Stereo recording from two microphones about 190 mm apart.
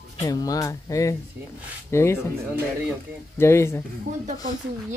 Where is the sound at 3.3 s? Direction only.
15° left (ahead or behind).